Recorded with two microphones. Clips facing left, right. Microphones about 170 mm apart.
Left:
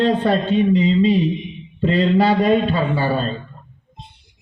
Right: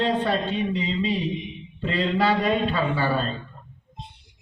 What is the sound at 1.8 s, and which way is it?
Speech, 40° left (ahead or behind).